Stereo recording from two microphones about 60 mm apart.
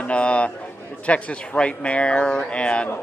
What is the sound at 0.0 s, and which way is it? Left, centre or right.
A man's voice, centre.